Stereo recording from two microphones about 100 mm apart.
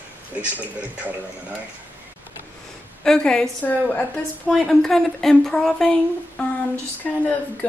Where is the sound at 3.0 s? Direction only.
5° left (ahead or behind).